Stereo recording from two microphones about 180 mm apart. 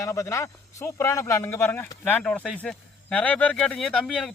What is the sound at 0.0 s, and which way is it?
Speech, 15° left (ahead or behind).